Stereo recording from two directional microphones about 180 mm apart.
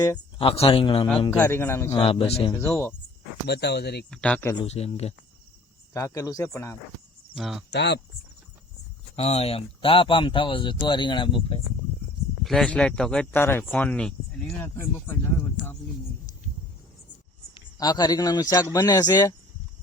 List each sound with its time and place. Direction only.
0.0 s speech: 25° left (ahead or behind)
1.4 s speech: 10° left (ahead or behind)
2.0 s speech: 30° left (ahead or behind)
2.5 s speech: 15° left (ahead or behind)
3.4 s speech: 65° left (ahead or behind)
4.1 s speech: 5° left (ahead or behind)
4.6 s speech: 35° left (ahead or behind)
5.9 s speech: 15° left (ahead or behind)
7.3 s speech: centre (ahead or behind)
7.7 s speech: 70° left (ahead or behind)
9.1 s speech: 35° left (ahead or behind)
12.4 s speech: centre (ahead or behind)
17.5 s speech: 20° left (ahead or behind)